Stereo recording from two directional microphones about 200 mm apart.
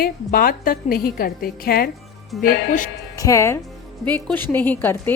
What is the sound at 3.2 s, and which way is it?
A woman's voice, 15° left (ahead or behind).